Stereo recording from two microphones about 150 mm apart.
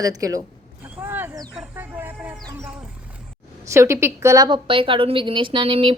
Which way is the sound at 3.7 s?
20° right (ahead or behind).